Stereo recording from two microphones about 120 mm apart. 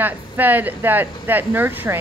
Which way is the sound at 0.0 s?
15° right (ahead or behind).